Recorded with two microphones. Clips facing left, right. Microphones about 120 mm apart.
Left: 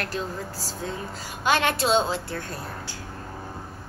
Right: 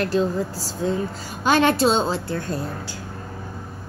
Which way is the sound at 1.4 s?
40° right (ahead or behind).